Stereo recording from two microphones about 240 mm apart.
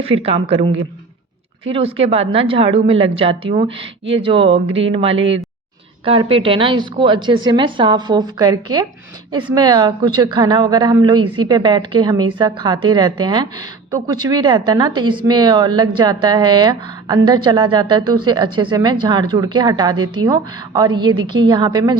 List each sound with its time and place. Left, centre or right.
0.0 s a woman's voice: right